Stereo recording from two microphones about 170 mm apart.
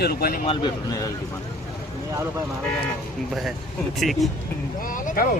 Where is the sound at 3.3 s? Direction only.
Centre (ahead or behind).